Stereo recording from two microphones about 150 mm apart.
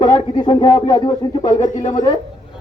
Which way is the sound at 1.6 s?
60° left (ahead or behind).